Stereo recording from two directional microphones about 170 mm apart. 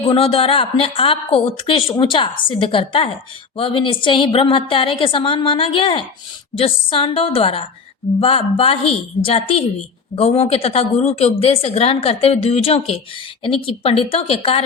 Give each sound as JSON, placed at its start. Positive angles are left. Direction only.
{"t": 0.1, "sound": "speech", "side_deg": 35}